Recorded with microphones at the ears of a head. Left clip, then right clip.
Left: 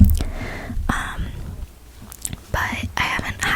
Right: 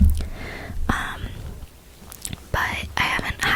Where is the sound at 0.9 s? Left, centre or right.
Centre.